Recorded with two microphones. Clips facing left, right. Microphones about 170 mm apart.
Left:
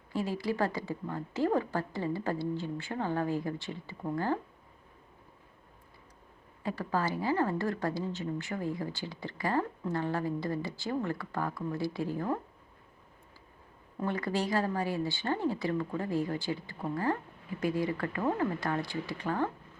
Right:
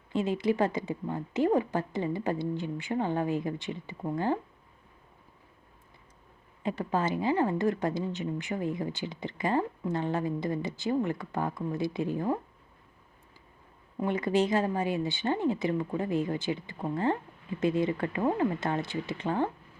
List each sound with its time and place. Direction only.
0.1 s speech: 20° right (ahead or behind)
6.6 s speech: 20° right (ahead or behind)
14.0 s speech: 20° right (ahead or behind)